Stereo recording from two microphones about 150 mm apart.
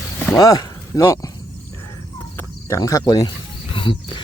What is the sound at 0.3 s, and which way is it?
Speech, 20° left (ahead or behind).